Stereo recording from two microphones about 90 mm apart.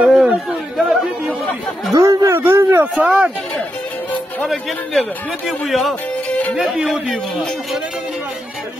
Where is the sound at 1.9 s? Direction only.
35° right (ahead or behind); by 3.3 s 15° right (ahead or behind).